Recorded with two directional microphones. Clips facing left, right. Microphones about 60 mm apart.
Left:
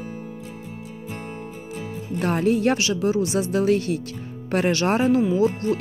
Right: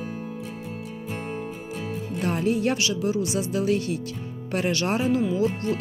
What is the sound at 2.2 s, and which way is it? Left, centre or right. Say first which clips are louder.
Speech: left 4 dB; left.